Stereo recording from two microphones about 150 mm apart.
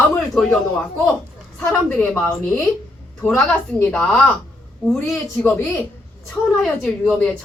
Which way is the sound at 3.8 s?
10° left (ahead or behind).